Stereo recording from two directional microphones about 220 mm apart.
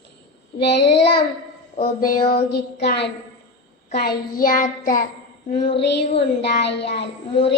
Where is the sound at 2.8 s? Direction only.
50° left (ahead or behind).